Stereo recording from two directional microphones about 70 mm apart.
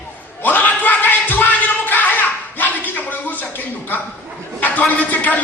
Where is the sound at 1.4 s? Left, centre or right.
Left.